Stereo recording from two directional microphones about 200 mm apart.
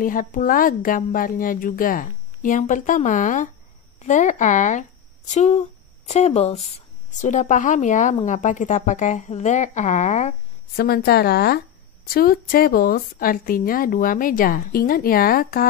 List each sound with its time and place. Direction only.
0.0 s a woman's voice: 40° left (ahead or behind)
10.8 s a woman's voice: 50° left (ahead or behind)